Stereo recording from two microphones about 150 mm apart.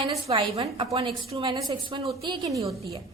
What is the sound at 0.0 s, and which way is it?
A woman's voice, 40° right (ahead or behind).